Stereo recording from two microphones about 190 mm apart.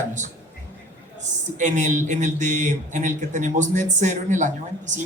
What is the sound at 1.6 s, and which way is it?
A man's voice, 40° right (ahead or behind).